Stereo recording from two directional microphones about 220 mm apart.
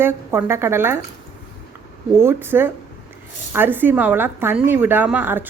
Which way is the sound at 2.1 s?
10° right (ahead or behind).